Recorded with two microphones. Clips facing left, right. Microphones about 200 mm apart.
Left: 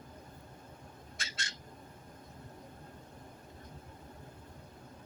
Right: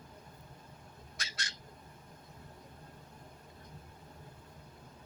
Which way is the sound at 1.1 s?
25° left (ahead or behind).